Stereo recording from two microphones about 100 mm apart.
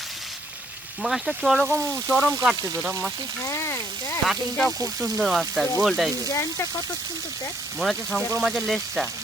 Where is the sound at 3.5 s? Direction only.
25° left (ahead or behind).